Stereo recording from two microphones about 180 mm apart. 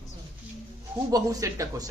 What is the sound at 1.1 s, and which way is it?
Speech, 20° right (ahead or behind).